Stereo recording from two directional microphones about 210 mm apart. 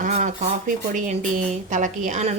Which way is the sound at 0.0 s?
30° right (ahead or behind).